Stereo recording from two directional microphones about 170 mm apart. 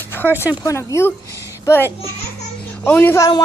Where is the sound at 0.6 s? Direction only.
15° left (ahead or behind).